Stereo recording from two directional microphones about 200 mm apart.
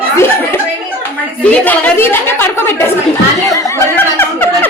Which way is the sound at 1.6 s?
10° left (ahead or behind).